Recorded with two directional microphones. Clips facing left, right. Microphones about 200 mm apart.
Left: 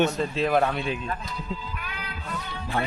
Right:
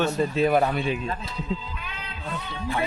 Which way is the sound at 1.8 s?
25° right (ahead or behind).